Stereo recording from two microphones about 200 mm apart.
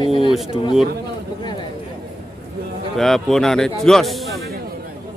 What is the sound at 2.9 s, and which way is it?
Speech, centre (ahead or behind).